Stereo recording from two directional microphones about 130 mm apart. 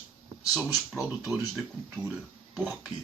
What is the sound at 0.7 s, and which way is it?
Speech, 25° left (ahead or behind).